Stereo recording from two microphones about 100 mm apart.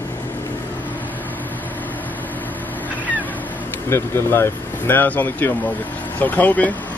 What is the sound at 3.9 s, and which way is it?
Speech, 25° left (ahead or behind).